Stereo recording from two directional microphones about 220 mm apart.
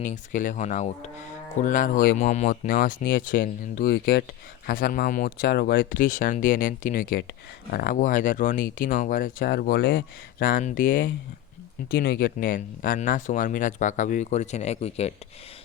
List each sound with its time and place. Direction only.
0.0 s speech: 35° left (ahead or behind)
10.4 s speech: 40° left (ahead or behind)